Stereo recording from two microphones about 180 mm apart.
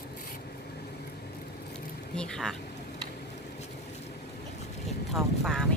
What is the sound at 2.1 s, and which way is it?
Speech, 5° left (ahead or behind).